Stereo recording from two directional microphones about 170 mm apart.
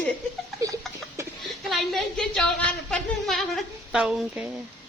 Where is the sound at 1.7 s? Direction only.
Centre (ahead or behind).